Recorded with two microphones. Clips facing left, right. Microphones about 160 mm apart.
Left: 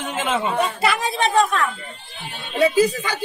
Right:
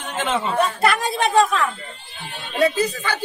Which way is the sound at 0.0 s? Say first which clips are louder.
Left 1 dB; 5° left (ahead or behind).